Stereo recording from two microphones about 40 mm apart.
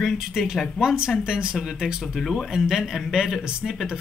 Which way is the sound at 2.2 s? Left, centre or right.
Centre.